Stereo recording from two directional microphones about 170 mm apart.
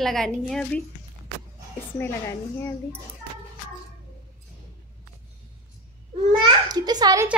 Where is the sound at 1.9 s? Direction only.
15° left (ahead or behind).